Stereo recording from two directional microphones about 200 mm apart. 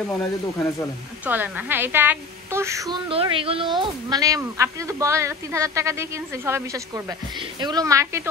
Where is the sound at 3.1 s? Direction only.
25° right (ahead or behind).